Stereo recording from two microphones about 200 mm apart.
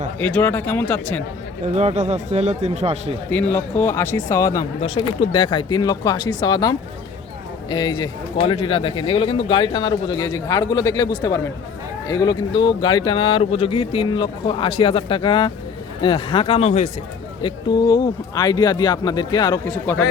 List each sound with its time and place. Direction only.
0.2 s speech: 5° left (ahead or behind)
1.7 s speech: 35° right (ahead or behind)
3.2 s speech: 10° left (ahead or behind)
4.8 s speech: 25° left (ahead or behind)
17.4 s speech: 20° left (ahead or behind)